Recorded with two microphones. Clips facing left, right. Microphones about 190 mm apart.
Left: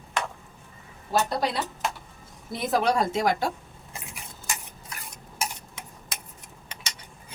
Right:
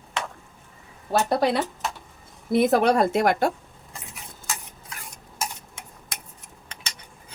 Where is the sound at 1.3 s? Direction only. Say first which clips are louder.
Right 6 dB; 55° right (ahead or behind).